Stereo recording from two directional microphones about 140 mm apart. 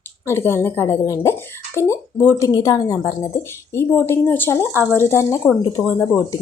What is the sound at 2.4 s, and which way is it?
Speech, 30° left (ahead or behind).